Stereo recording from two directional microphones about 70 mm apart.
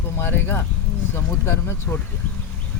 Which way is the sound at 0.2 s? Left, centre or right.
Left.